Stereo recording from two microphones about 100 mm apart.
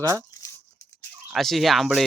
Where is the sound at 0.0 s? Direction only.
35° right (ahead or behind).